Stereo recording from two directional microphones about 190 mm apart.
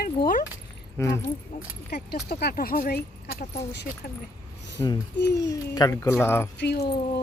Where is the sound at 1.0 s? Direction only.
10° left (ahead or behind).